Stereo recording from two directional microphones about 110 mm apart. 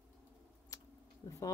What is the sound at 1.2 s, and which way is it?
Speech, 35° left (ahead or behind).